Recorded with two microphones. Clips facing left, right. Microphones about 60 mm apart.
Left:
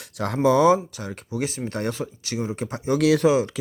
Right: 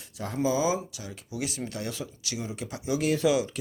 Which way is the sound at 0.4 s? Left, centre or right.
Left.